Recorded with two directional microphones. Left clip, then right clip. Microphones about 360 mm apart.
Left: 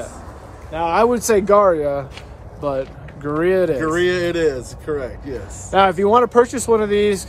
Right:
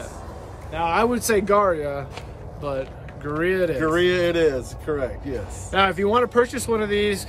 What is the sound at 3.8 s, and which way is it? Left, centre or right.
Speech, centre.